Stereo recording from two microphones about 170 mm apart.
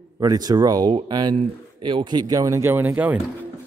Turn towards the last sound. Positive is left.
turn(degrees=-10)  # may be behind; listen again after turning